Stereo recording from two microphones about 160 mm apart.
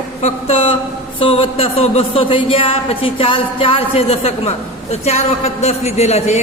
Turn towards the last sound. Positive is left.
turn(degrees=45)  # may be behind; listen again after turning